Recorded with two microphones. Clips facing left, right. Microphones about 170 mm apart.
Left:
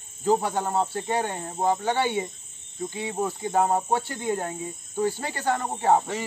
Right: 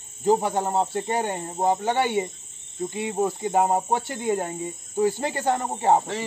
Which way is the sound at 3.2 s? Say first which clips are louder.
Right 2 dB; 20° right (ahead or behind).